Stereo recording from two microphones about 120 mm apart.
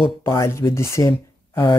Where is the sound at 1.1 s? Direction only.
45° left (ahead or behind).